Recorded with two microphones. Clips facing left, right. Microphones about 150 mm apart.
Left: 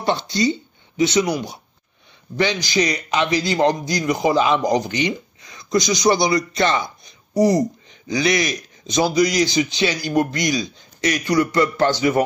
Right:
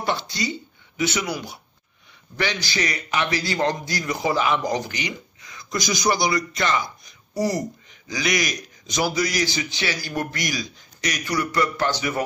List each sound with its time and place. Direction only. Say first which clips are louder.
0.3 s a man's voice: left 8 dB; 25° left (ahead or behind)